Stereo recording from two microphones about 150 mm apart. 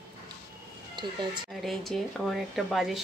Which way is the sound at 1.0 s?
30° right (ahead or behind).